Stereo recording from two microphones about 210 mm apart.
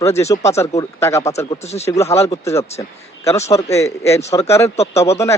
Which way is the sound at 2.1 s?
15° left (ahead or behind).